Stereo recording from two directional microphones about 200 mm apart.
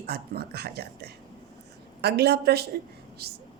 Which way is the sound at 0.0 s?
50° right (ahead or behind).